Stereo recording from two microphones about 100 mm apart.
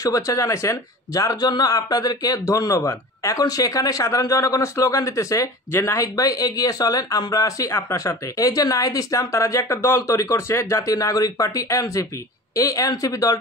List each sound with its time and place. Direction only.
0.0 s a man's voice: 35° left (ahead or behind)
2.8 s speech: 25° left (ahead or behind)
3.3 s a man's voice: 35° left (ahead or behind)